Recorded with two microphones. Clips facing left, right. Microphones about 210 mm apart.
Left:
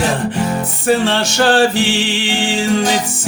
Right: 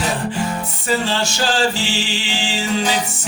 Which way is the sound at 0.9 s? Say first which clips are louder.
Left 6 dB; 65° left (ahead or behind).